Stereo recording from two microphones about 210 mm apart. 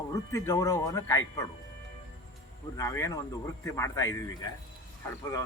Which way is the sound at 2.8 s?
15° left (ahead or behind).